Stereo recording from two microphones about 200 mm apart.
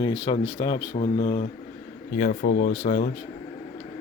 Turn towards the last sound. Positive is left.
turn(degrees=40)  # may be behind; listen again after turning